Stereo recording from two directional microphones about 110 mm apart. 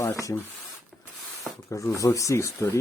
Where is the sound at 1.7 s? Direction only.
30° left (ahead or behind).